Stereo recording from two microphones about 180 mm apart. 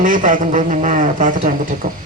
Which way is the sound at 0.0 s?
50° right (ahead or behind).